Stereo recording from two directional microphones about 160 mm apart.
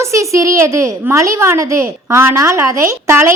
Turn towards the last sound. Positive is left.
turn(degrees=-15)  # may be behind; listen again after turning